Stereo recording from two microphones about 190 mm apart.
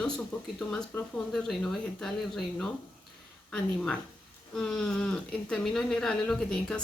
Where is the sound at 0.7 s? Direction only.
5° left (ahead or behind).